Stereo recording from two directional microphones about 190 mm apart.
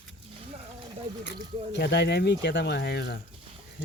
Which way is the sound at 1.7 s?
65° left (ahead or behind).